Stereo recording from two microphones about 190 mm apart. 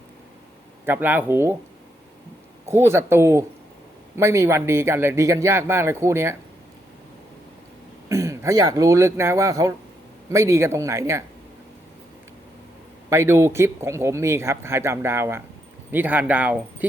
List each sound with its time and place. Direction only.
0.9 s speech: 10° right (ahead or behind)
2.6 s speech: 15° right (ahead or behind)
8.1 s speech: 15° right (ahead or behind)
13.1 s speech: 15° right (ahead or behind)